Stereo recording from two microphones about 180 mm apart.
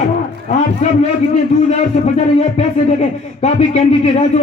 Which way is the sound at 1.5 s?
45° left (ahead or behind).